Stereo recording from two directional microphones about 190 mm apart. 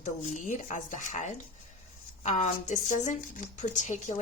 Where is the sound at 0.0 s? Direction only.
40° left (ahead or behind).